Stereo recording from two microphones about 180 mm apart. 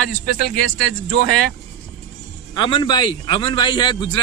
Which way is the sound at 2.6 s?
25° left (ahead or behind).